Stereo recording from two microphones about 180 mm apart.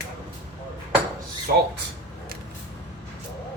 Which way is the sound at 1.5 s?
55° right (ahead or behind).